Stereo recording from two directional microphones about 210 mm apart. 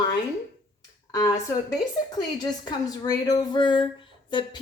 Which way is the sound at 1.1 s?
15° left (ahead or behind).